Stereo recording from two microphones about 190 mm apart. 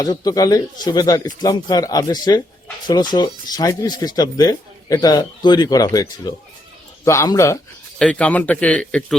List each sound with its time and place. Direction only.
0.0 s a man's voice: 20° left (ahead or behind)
7.9 s a man's voice: 5° left (ahead or behind)